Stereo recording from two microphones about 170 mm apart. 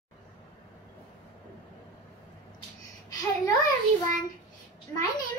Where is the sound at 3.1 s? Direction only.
20° left (ahead or behind).